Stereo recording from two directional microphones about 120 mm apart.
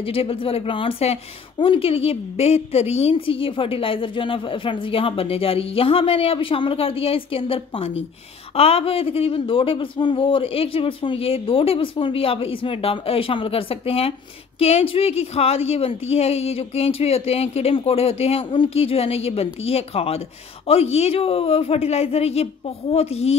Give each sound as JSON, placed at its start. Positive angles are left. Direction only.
{"t": 0.0, "sound": "a woman's voice", "side_deg": 50}
{"t": 1.6, "sound": "a woman's voice", "side_deg": 50}